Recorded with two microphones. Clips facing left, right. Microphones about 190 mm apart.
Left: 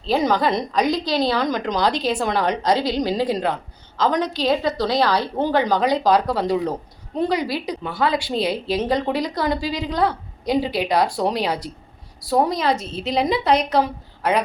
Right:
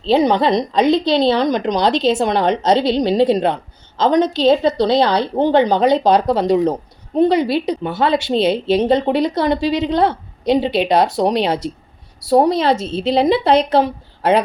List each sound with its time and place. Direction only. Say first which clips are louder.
0.0 s speech: right 5 dB; 25° right (ahead or behind)